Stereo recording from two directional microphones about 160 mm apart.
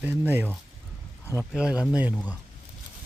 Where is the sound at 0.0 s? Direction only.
10° right (ahead or behind).